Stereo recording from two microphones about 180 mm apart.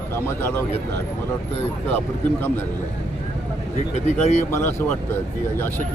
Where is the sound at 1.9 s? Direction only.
10° left (ahead or behind).